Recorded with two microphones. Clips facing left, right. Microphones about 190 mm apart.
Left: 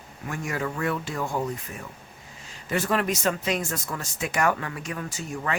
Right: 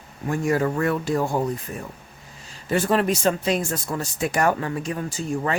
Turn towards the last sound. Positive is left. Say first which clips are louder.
# right 6 dB
turn(degrees=-30)  # may be behind; listen again after turning